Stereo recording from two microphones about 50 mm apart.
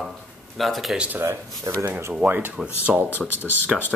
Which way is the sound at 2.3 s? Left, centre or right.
Right.